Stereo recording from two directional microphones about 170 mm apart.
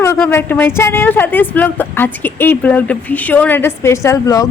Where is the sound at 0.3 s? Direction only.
15° left (ahead or behind).